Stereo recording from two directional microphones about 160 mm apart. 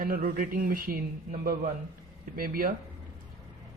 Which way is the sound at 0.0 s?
60° right (ahead or behind).